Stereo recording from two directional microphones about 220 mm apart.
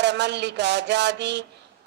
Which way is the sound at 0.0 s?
50° right (ahead or behind).